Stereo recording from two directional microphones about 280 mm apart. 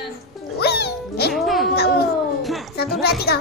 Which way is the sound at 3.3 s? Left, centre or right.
Left.